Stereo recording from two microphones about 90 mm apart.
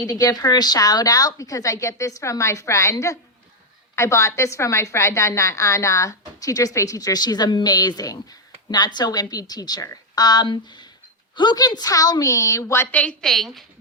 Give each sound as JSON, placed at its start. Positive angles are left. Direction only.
{"t": 0.0, "sound": "a woman's voice", "side_deg": 45}
{"t": 12.9, "sound": "a woman's voice", "side_deg": 15}
{"t": 13.2, "sound": "a woman's voice", "side_deg": 0}